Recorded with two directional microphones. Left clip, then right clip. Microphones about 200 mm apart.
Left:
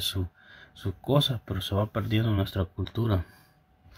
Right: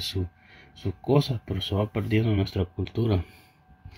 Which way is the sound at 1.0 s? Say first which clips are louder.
Right 1 dB; 10° left (ahead or behind).